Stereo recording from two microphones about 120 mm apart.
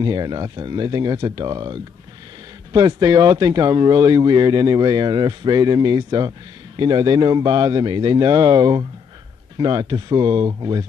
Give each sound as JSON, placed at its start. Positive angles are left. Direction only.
{"t": 0.0, "sound": "speech", "side_deg": -35}